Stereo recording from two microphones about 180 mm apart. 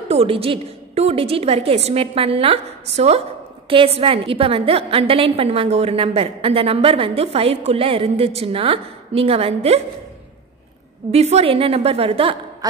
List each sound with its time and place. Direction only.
0.1 s a woman's voice: 35° right (ahead or behind)
11.1 s a woman's voice: 35° right (ahead or behind)